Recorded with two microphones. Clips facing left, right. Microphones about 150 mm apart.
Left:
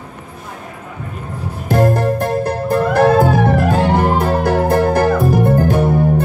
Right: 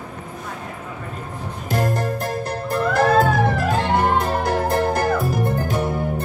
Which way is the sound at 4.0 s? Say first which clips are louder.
Left 4 dB; 55° left (ahead or behind).